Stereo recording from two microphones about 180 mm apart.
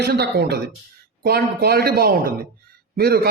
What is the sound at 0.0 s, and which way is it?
A man's voice, 60° right (ahead or behind).